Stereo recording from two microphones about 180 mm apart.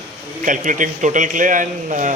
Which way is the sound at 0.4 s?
45° right (ahead or behind).